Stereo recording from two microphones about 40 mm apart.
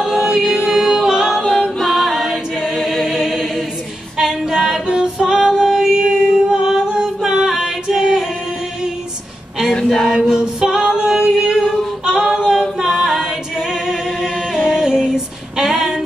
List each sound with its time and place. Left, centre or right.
0.0 s music: centre
0.7 s a capella: centre
1.5 s a capella: centre
4.9 s music: centre
10.0 s a capella: centre